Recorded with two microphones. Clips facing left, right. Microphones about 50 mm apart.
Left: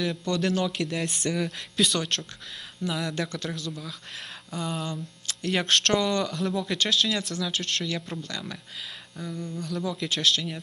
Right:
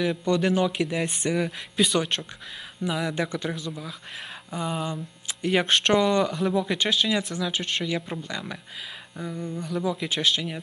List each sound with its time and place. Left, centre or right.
0.0 s speech: centre